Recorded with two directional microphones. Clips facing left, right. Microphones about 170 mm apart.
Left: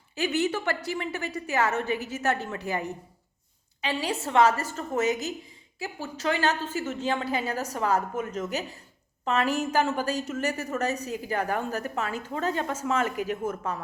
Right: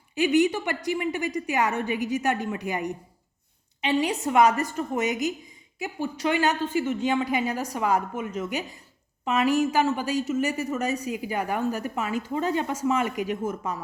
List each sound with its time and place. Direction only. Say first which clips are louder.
0.2 s a woman's voice: right 5 dB; 15° right (ahead or behind)